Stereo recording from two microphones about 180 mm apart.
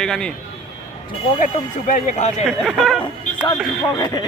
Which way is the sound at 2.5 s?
Centre (ahead or behind).